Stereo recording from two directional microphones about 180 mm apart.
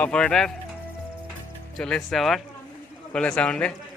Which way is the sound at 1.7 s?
5° left (ahead or behind).